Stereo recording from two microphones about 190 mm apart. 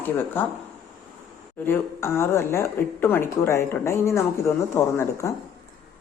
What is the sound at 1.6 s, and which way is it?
Speech, 15° left (ahead or behind).